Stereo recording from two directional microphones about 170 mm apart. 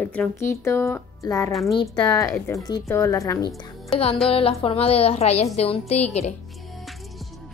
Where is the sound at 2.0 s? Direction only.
20° left (ahead or behind).